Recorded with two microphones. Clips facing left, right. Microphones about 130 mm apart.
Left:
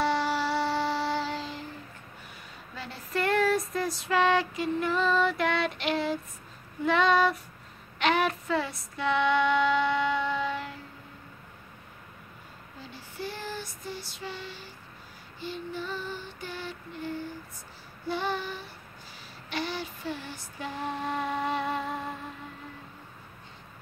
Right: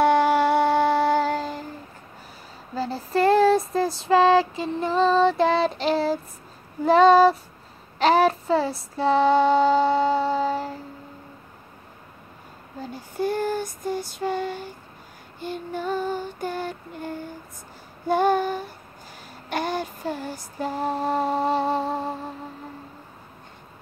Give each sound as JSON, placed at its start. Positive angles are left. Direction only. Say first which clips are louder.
{"t": 0.0, "sound": "music", "louder": "right 9 dB", "side_deg": -55}
{"t": 2.7, "sound": "female singing", "louder": "right 9 dB", "side_deg": -35}
{"t": 8.0, "sound": "child singing", "louder": "right 8 dB", "side_deg": -35}
{"t": 12.8, "sound": "female singing", "louder": "right 12 dB", "side_deg": -45}